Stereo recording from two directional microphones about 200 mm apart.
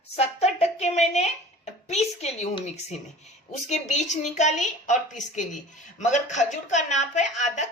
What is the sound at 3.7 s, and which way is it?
A woman's voice, 35° left (ahead or behind).